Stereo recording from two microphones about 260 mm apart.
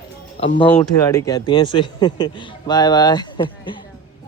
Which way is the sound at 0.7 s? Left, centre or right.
Centre.